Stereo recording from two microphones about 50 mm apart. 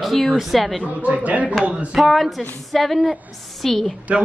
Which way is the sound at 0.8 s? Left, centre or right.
Right.